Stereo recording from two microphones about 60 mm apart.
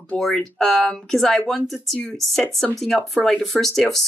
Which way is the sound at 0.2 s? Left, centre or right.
Centre.